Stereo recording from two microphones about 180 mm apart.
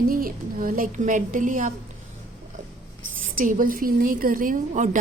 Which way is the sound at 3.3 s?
50° right (ahead or behind).